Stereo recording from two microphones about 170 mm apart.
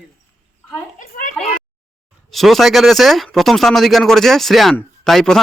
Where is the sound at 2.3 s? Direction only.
Centre (ahead or behind).